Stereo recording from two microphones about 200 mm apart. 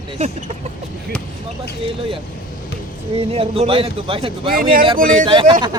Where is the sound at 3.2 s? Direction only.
30° right (ahead or behind).